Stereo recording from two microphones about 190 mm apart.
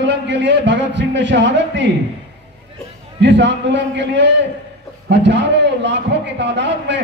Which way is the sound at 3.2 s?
70° right (ahead or behind).